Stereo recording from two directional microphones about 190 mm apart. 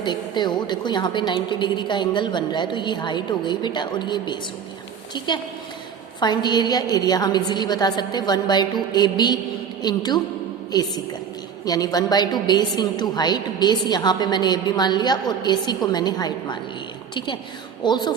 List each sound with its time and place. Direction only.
0.0 s a woman's voice: 25° left (ahead or behind)
17.8 s a woman's voice: 25° left (ahead or behind)